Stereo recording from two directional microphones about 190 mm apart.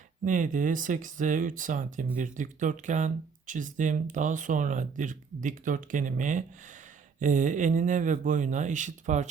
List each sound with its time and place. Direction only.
0.3 s speech: 45° right (ahead or behind)